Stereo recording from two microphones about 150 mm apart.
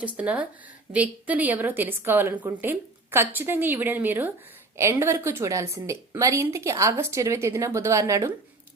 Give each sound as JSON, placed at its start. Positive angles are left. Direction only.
{"t": 0.0, "sound": "a woman's voice", "side_deg": -10}